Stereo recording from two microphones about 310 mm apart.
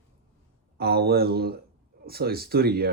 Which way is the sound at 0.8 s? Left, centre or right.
Right.